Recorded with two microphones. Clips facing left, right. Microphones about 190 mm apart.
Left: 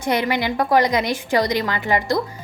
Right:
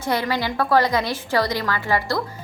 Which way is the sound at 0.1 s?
20° left (ahead or behind).